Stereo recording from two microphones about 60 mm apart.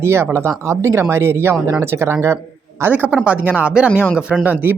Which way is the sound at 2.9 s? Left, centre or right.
Right.